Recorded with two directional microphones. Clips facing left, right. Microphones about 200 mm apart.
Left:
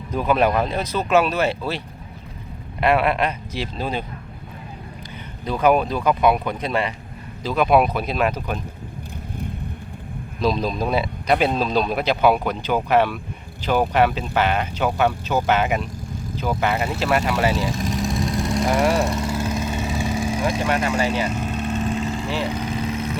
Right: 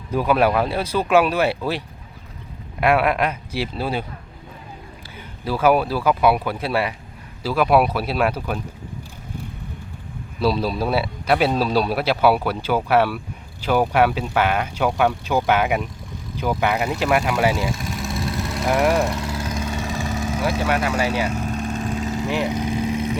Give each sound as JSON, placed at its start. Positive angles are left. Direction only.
{"t": 0.1, "sound": "a man's voice", "side_deg": -10}
{"t": 2.8, "sound": "a man's voice", "side_deg": -10}
{"t": 5.5, "sound": "a man's voice", "side_deg": -5}
{"t": 10.4, "sound": "a man's voice", "side_deg": -5}
{"t": 18.1, "sound": "vehicle", "side_deg": 15}
{"t": 18.7, "sound": "a man's voice", "side_deg": -5}
{"t": 18.9, "sound": "vehicle", "side_deg": 10}
{"t": 20.7, "sound": "speech", "side_deg": -10}
{"t": 21.8, "sound": "vehicle", "side_deg": 0}
{"t": 22.3, "sound": "vehicle", "side_deg": -15}